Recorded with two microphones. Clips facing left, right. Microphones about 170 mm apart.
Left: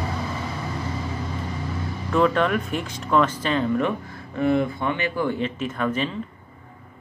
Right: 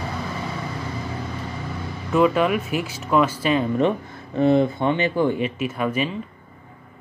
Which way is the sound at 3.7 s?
25° right (ahead or behind).